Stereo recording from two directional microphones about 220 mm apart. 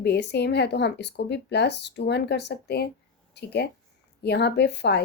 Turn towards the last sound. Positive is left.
turn(degrees=50)  # may be behind; listen again after turning